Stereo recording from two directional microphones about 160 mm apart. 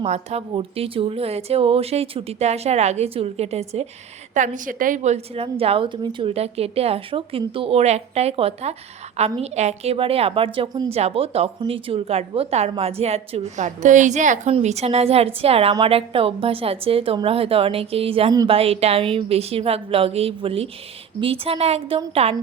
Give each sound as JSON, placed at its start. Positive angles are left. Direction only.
{"t": 0.0, "sound": "a woman's voice", "side_deg": -40}
{"t": 4.4, "sound": "a woman's voice", "side_deg": -55}